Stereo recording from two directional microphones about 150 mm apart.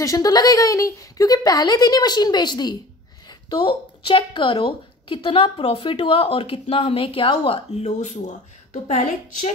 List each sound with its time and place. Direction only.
0.0 s speech: 25° left (ahead or behind); by 8.4 s 55° left (ahead or behind)